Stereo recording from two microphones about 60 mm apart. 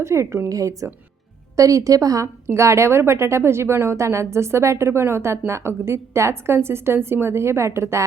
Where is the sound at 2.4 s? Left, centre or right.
Right.